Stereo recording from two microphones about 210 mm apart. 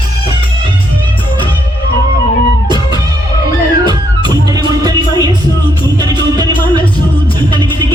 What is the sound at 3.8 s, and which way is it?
Music, 20° right (ahead or behind).